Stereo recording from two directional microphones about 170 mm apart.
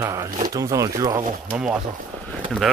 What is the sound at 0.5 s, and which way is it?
Speech, 20° right (ahead or behind).